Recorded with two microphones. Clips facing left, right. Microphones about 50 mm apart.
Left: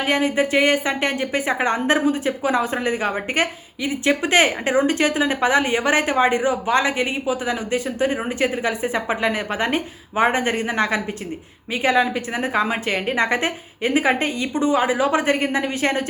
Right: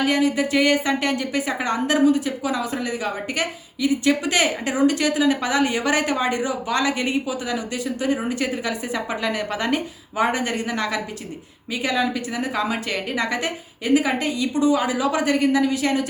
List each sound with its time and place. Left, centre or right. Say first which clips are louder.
0.0 s a woman's voice: even; left